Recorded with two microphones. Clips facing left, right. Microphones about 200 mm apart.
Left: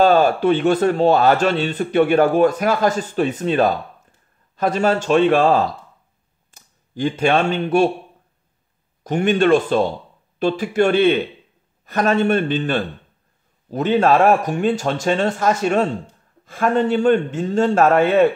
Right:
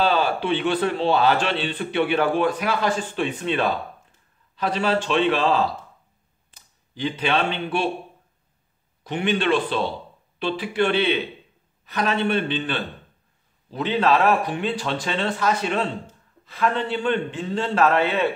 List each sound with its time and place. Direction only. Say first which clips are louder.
0.0 s speech: left 7 dB; 45° left (ahead or behind)
9.0 s speech: left 6 dB; 45° left (ahead or behind)